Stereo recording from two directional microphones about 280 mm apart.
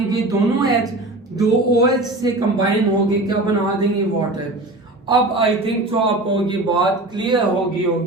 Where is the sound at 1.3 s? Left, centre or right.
Centre.